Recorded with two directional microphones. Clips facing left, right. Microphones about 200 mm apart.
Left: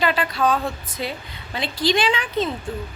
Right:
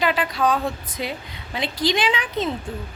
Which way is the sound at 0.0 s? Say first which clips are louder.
Even; 15° right (ahead or behind).